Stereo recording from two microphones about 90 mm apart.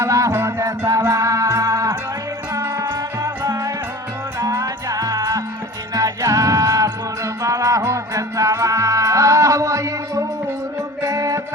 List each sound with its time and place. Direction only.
0.0 s music: 35° right (ahead or behind)